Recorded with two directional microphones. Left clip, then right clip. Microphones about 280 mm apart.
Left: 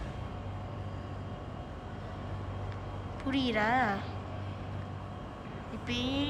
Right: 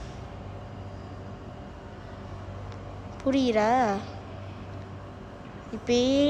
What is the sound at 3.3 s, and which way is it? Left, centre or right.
Speech, centre.